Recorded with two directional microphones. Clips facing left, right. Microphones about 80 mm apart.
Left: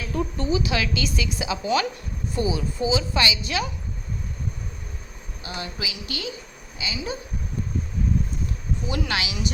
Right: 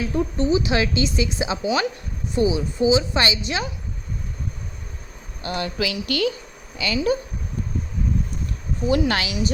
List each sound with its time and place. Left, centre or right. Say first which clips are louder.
0.0 s a woman's voice: right 5 dB; right
5.4 s a woman's voice: right 8 dB; right
8.9 s speech: right 7 dB; right